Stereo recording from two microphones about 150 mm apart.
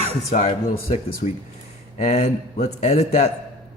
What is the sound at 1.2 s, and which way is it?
Speech, 50° left (ahead or behind).